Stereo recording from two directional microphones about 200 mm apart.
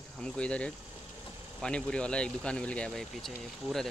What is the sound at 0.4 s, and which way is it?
Speech, 5° left (ahead or behind).